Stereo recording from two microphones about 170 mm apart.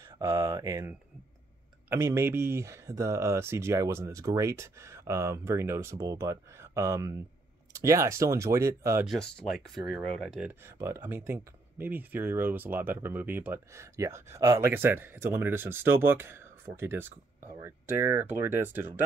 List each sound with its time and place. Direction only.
0.2 s speech: 20° right (ahead or behind)
9.0 s speech: centre (ahead or behind)
10.8 s speech: 15° right (ahead or behind)